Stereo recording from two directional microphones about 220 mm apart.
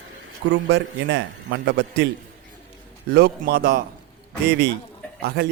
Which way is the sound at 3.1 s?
45° right (ahead or behind).